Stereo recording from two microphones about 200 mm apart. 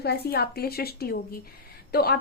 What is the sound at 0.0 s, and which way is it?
A woman's voice, 55° left (ahead or behind).